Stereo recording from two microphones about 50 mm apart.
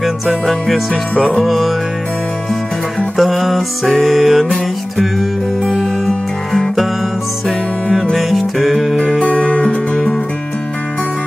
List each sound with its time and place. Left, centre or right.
0.5 s music: centre
1.1 s music: centre
1.4 s music: centre
3.2 s music: centre
5.8 s guitar: centre
7.4 s music: centre
8.9 s music: centre